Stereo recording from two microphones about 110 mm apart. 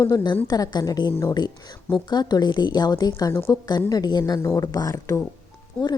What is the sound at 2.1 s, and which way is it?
Speech, 40° left (ahead or behind).